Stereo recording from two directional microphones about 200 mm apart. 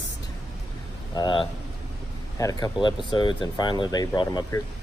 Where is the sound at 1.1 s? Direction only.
25° left (ahead or behind).